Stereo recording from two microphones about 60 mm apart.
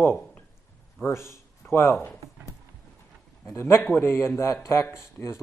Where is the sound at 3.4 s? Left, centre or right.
Left.